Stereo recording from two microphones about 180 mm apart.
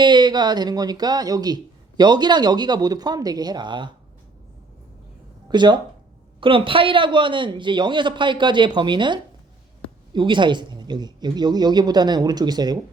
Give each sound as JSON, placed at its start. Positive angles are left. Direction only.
{"t": 0.0, "sound": "speech", "side_deg": -25}
{"t": 5.5, "sound": "speech", "side_deg": -25}